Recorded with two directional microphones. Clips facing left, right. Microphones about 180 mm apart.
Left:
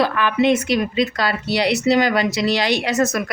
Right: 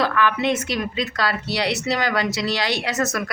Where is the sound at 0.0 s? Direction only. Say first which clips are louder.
Left 3 dB; 15° left (ahead or behind).